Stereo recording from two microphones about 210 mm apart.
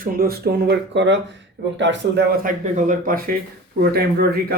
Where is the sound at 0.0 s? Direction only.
45° right (ahead or behind).